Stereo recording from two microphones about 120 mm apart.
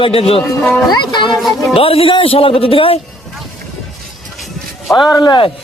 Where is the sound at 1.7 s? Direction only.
55° left (ahead or behind).